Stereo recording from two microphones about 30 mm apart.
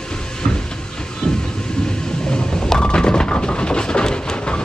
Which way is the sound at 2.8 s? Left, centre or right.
Left.